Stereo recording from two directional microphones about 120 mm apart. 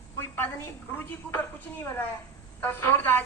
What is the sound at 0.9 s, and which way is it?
A man's voice, 20° left (ahead or behind).